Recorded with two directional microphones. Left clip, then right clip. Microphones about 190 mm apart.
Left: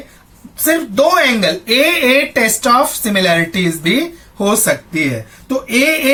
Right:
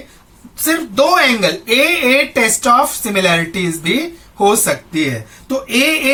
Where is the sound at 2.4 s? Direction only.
15° right (ahead or behind).